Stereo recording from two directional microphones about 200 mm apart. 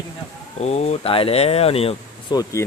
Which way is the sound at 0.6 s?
35° left (ahead or behind).